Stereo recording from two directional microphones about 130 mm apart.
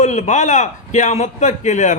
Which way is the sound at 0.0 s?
65° left (ahead or behind).